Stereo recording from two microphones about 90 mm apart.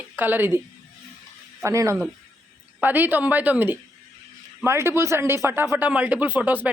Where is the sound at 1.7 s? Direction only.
30° right (ahead or behind).